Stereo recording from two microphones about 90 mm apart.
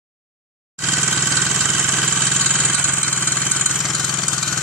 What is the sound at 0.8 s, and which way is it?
Engine, 15° right (ahead or behind).